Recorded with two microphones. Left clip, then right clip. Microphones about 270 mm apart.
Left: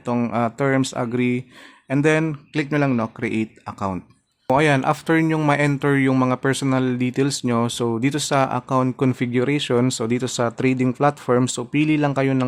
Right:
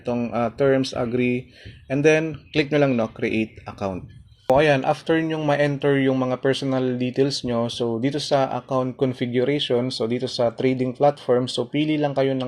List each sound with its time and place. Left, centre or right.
0.0 s speech: left